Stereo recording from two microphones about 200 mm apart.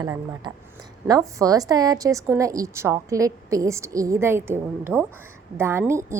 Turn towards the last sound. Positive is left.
turn(degrees=-15)  # may be behind; listen again after turning